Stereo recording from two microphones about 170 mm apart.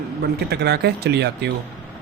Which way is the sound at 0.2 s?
75° right (ahead or behind).